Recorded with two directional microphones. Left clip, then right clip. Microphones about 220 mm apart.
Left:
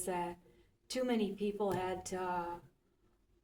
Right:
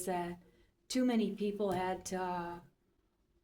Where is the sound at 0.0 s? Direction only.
40° right (ahead or behind).